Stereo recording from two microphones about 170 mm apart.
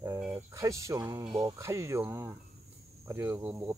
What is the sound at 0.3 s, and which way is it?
Speech, 15° right (ahead or behind).